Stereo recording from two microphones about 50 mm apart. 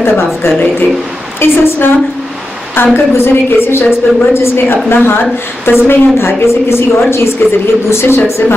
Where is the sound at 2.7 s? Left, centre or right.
Left.